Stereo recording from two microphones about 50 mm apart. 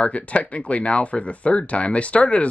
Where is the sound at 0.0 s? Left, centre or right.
Left.